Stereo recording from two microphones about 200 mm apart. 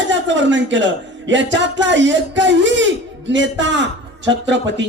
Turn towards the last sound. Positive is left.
turn(degrees=-65)  # may be behind; listen again after turning